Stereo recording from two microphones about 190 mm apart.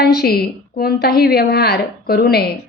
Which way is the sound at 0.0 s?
55° left (ahead or behind).